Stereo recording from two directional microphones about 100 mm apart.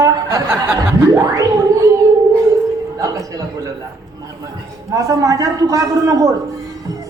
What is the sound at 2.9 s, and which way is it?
Speech, 35° right (ahead or behind).